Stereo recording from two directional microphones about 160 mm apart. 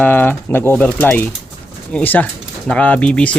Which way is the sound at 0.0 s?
10° left (ahead or behind).